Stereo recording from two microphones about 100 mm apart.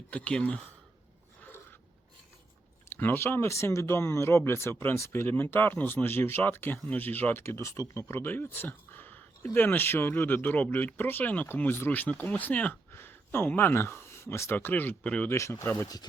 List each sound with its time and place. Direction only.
0.1 s speech: 10° left (ahead or behind)
2.9 s speech: 20° left (ahead or behind)
15.3 s speech: 30° left (ahead or behind)